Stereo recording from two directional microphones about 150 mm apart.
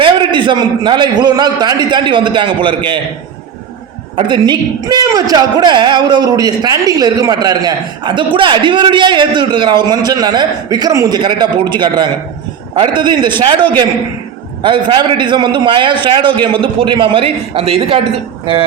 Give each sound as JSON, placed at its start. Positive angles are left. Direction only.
{"t": 0.0, "sound": "a man's voice", "side_deg": -35}
{"t": 4.2, "sound": "a man's voice", "side_deg": -30}